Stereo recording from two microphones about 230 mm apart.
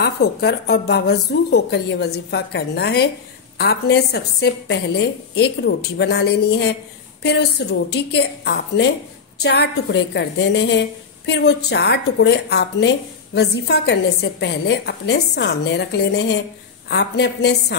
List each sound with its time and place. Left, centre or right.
0.0 s a woman's voice: left